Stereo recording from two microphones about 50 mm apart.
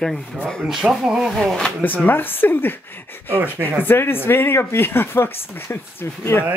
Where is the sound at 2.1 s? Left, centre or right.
Left.